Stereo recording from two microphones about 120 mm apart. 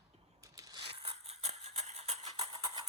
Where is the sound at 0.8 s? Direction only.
50° right (ahead or behind).